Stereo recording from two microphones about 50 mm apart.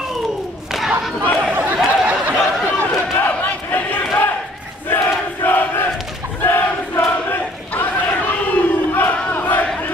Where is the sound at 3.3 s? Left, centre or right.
Left.